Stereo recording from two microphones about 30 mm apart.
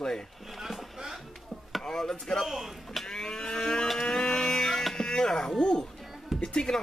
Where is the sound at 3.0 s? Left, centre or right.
Left.